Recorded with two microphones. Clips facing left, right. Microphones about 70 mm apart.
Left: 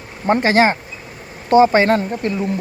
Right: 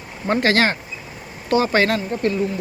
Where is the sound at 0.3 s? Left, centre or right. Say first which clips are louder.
Left 4 dB; centre.